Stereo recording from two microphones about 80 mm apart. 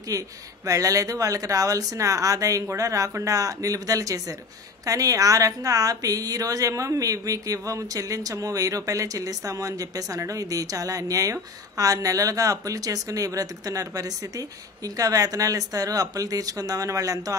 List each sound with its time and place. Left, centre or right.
0.1 s a woman's voice: right